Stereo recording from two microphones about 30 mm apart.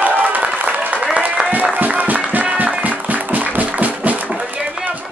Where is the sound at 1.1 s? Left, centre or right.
Right.